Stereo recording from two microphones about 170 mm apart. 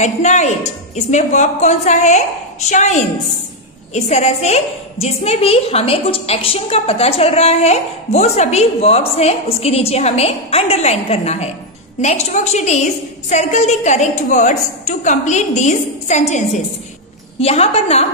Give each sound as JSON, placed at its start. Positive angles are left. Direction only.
{"t": 0.0, "sound": "a woman's voice", "side_deg": 45}